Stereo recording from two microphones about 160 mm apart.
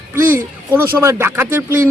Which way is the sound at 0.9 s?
15° right (ahead or behind).